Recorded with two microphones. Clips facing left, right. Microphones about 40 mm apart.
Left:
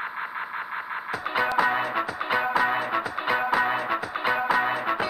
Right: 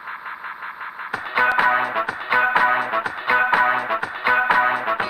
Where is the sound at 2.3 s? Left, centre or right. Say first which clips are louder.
Right 7 dB; right.